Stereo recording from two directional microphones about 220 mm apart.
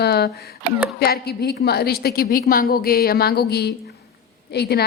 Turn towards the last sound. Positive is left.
turn(degrees=45)  # may be behind; listen again after turning